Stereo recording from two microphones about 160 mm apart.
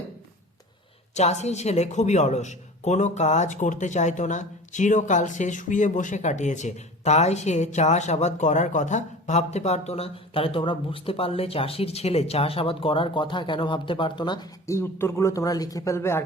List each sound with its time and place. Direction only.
1.1 s a man's voice: 45° left (ahead or behind); by 14.8 s 30° left (ahead or behind)
14.8 s speech: 15° left (ahead or behind)